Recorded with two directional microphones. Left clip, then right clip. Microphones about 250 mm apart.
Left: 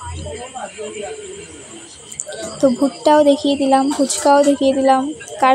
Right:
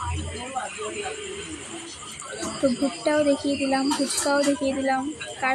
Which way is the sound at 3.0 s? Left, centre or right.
Left.